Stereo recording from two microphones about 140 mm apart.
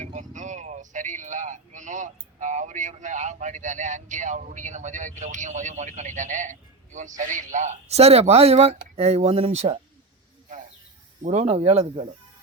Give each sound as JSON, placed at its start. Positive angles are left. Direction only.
{"t": 0.0, "sound": "a man's voice", "side_deg": -60}
{"t": 11.2, "sound": "speech", "side_deg": -50}